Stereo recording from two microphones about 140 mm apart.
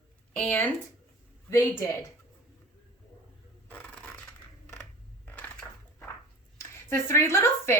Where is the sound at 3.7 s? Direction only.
10° left (ahead or behind).